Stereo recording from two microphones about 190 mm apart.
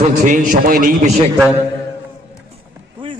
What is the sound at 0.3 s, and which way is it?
Speech, 45° right (ahead or behind).